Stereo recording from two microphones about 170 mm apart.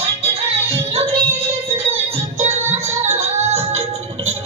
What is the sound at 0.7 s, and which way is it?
Music, 35° right (ahead or behind).